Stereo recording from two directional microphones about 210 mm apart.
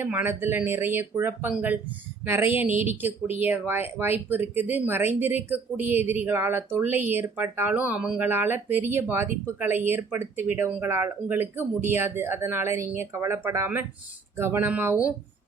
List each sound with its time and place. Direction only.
0.0 s speech: 10° right (ahead or behind)